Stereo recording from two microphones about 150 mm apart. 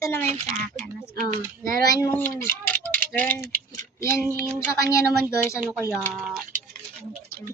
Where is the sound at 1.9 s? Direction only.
25° left (ahead or behind).